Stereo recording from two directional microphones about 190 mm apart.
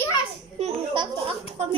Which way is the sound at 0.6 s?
30° right (ahead or behind).